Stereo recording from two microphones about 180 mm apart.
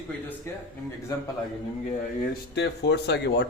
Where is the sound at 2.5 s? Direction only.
70° left (ahead or behind).